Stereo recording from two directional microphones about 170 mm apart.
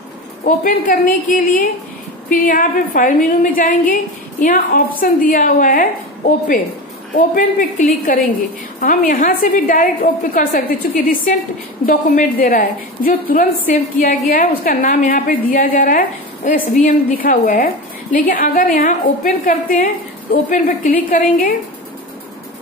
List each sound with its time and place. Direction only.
0.5 s a woman's voice: 55° left (ahead or behind)
7.2 s a woman's voice: 50° left (ahead or behind)